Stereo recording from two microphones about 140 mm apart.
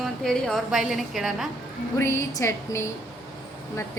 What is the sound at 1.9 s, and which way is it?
A woman's voice, 20° left (ahead or behind).